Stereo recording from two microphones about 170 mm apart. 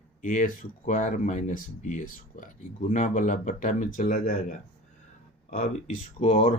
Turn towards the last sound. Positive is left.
turn(degrees=35)  # may be behind; listen again after turning